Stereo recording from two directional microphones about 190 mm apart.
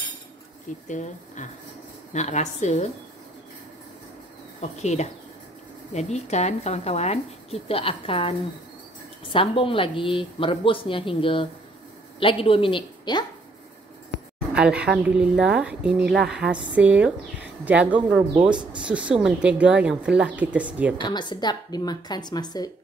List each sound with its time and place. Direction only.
0.8 s speech: 40° left (ahead or behind)
4.6 s a woman's voice: 35° left (ahead or behind)
14.5 s speech: 5° right (ahead or behind)
18.5 s speech: 25° right (ahead or behind)
18.8 s speech: 5° right (ahead or behind)
21.0 s a woman's voice: 25° left (ahead or behind)